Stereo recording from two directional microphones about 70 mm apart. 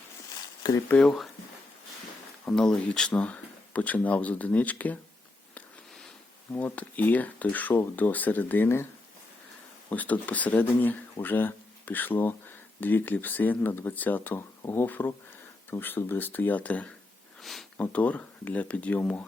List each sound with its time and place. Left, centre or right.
0.6 s speech: left
2.5 s speech: centre
6.7 s speech: left
9.9 s speech: left
17.4 s speech: centre
17.7 s speech: left